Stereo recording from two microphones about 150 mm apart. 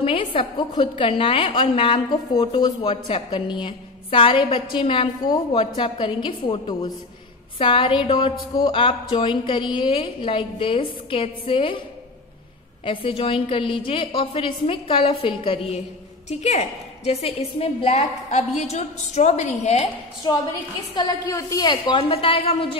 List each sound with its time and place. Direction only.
0.0 s a woman's voice: 40° left (ahead or behind)
12.8 s a woman's voice: 35° left (ahead or behind)
20.2 s a woman's voice: 35° left (ahead or behind)